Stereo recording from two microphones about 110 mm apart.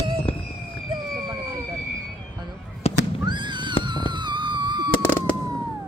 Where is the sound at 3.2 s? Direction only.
45° right (ahead or behind).